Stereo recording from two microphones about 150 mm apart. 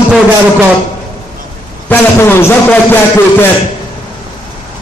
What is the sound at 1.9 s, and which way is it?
A man's voice, 15° left (ahead or behind).